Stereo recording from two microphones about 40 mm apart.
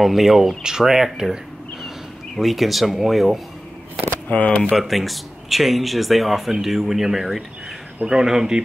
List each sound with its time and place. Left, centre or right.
0.0 s speech: centre
0.6 s speech: centre
4.1 s a sound: left
4.7 s speech: centre